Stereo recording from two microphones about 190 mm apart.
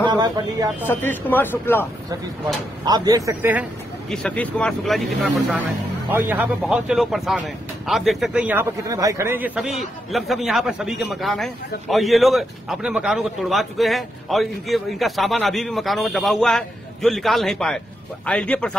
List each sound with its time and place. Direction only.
0.0 s speech: 20° right (ahead or behind)
0.8 s speech: 10° left (ahead or behind)
2.8 s a man's voice: 20° right (ahead or behind)
4.1 s speech: 5° left (ahead or behind)
6.0 s speech: 10° right (ahead or behind)